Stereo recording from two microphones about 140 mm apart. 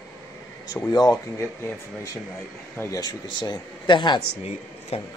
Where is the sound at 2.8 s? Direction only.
25° left (ahead or behind).